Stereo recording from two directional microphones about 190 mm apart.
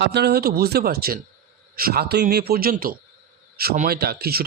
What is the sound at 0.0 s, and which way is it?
Speech, 60° right (ahead or behind).